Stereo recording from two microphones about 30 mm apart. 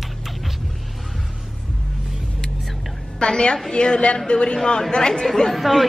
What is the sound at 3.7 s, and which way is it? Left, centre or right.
Speech, left.